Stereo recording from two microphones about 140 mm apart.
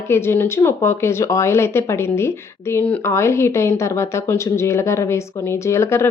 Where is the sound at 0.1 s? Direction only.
15° left (ahead or behind).